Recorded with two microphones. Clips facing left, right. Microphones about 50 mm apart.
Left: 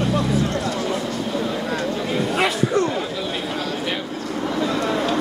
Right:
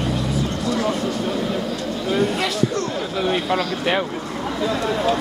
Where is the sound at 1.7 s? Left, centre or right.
Left.